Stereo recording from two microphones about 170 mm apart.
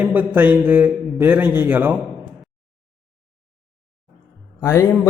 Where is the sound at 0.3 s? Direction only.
10° right (ahead or behind).